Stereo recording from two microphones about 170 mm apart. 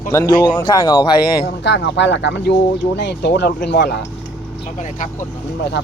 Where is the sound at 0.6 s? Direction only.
25° left (ahead or behind).